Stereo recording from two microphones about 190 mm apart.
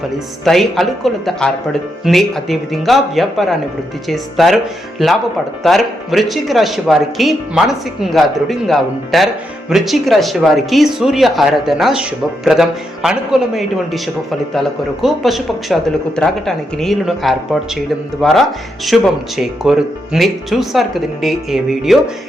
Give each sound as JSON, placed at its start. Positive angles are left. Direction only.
{"t": 0.4, "sound": "speech", "side_deg": 0}
{"t": 15.0, "sound": "speech", "side_deg": 0}